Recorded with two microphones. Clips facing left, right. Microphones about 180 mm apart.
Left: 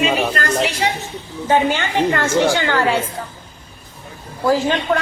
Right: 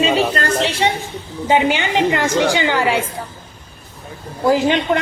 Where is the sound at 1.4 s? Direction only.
15° right (ahead or behind).